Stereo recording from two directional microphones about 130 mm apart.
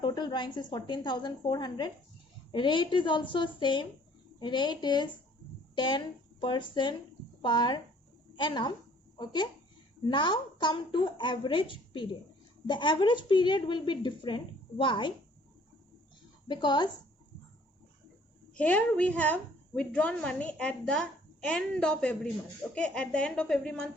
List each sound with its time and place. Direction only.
0.0 s a woman's voice: 35° left (ahead or behind)
16.5 s a woman's voice: 35° left (ahead or behind)
18.5 s a woman's voice: 10° left (ahead or behind)